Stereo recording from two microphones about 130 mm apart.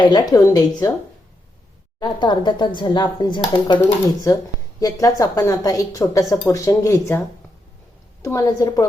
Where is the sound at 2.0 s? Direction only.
35° left (ahead or behind).